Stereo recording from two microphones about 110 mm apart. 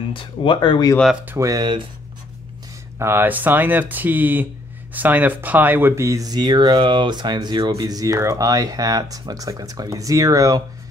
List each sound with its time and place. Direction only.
0.1 s speech: 50° left (ahead or behind)
1.4 s speech: 30° right (ahead or behind)
3.0 s speech: 20° right (ahead or behind)